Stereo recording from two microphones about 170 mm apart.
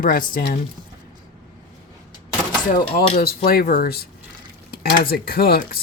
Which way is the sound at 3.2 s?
60° left (ahead or behind).